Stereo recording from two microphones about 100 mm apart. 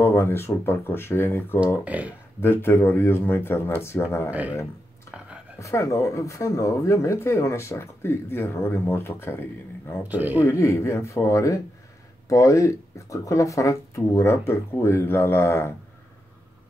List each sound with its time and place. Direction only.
0.0 s speech: 25° left (ahead or behind)
1.9 s speech: 15° right (ahead or behind)
2.4 s speech: 25° left (ahead or behind)
4.3 s speech: 15° right (ahead or behind)
5.1 s a sound: 5° right (ahead or behind)
5.6 s speech: 30° left (ahead or behind)
10.0 s speech: 15° right (ahead or behind)
10.4 s speech: 30° left (ahead or behind)